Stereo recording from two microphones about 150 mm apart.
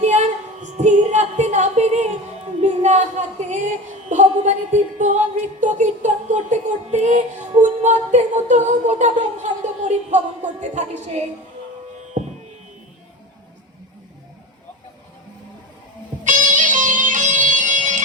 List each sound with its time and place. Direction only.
0.0 s speech: 50° right (ahead or behind)
2.6 s music: 50° right (ahead or behind)
16.2 s music: 60° right (ahead or behind)